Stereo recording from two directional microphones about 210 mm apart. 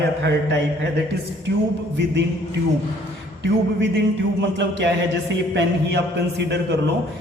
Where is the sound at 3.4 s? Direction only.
55° right (ahead or behind).